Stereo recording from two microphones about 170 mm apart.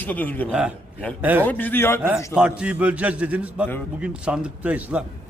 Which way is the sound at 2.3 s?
5° right (ahead or behind).